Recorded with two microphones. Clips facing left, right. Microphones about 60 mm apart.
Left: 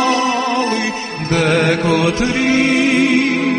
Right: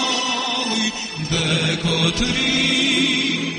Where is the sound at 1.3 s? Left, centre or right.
Left.